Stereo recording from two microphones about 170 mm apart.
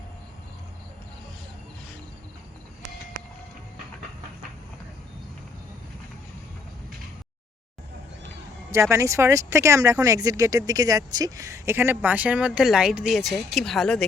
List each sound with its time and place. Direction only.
8.7 s speech: 15° right (ahead or behind); by 14.0 s centre (ahead or behind)